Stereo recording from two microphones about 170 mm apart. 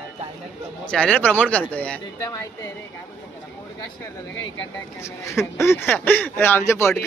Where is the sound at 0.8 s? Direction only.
5° left (ahead or behind).